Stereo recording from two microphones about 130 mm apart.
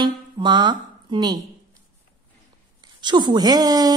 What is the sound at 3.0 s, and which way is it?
Speech, 35° right (ahead or behind).